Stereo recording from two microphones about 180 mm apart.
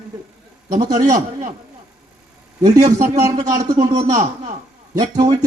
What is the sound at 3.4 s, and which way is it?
A man's voice, 20° right (ahead or behind).